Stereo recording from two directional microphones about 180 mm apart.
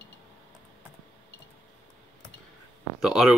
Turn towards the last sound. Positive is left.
turn(degrees=0)  # may be behind; listen again after turning